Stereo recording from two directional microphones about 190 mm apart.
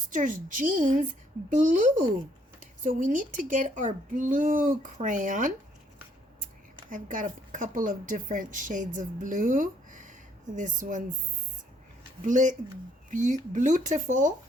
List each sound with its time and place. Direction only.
0.1 s speech: 45° right (ahead or behind)
6.9 s speech: 45° right (ahead or behind)
12.2 s speech: 40° right (ahead or behind)